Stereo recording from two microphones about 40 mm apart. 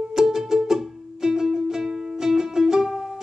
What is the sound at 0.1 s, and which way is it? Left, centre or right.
Music, centre.